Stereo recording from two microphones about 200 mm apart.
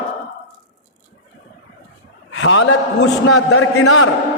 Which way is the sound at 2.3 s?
85° left.